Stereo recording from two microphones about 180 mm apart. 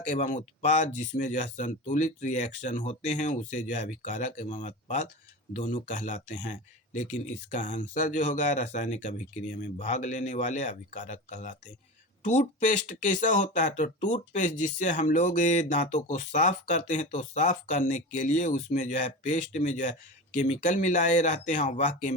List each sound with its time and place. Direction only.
0.1 s speech: 45° left (ahead or behind)